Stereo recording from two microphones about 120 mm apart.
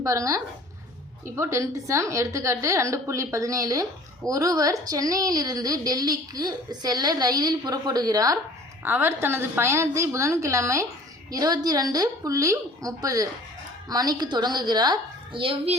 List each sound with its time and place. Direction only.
0.0 s a woman's voice: 25° right (ahead or behind)
8.8 s a woman's voice: 20° right (ahead or behind); by 15.8 s 55° right (ahead or behind)